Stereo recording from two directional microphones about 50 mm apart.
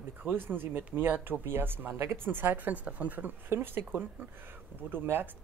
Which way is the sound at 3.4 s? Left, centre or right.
Right.